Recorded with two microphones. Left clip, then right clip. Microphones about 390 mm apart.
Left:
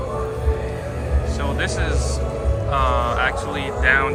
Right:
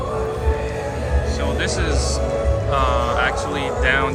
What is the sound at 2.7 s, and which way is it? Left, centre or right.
Speech, centre.